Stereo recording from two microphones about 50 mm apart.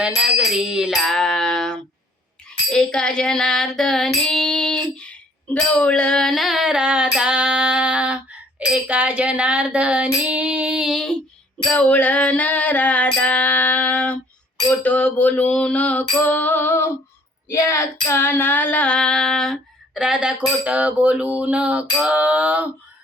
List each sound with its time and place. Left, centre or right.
0.0 s music: centre
1.0 s music: centre
6.3 s female singing: centre; by 10.8 s right
10.9 s a sound: centre
11.7 s a sound: left
13.2 s female singing: left
17.5 s female singing: left; by 19.5 s centre
19.9 s music: centre
20.7 s female singing: right
22.0 s a sound: right